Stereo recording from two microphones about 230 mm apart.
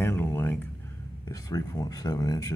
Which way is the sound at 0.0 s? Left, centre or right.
Centre.